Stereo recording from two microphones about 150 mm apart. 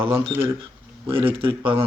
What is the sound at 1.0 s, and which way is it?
Speech, 35° right (ahead or behind).